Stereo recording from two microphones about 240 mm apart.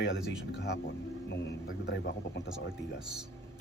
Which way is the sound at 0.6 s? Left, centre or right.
Left.